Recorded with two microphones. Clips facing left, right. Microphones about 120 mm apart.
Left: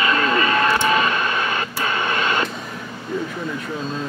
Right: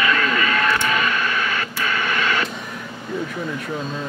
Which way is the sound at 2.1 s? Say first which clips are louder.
Even; 25° left (ahead or behind).